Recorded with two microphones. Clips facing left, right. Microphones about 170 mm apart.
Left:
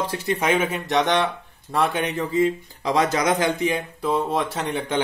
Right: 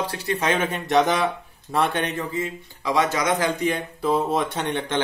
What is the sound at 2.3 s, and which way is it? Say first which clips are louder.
Speech: left 8 dB; 30° left (ahead or behind).